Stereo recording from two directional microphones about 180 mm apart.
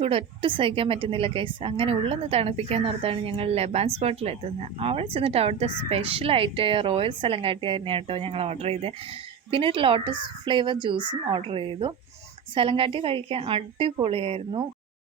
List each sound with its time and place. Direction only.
0.0 s speech: 30° right (ahead or behind)